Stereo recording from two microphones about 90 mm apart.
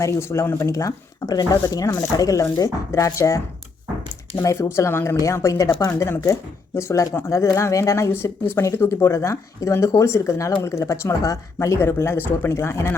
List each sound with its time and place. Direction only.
0.0 s speech: 30° left (ahead or behind)
4.4 s speech: 30° left (ahead or behind)